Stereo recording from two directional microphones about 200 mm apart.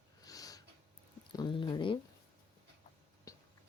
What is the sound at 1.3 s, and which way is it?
Speech, 20° left (ahead or behind).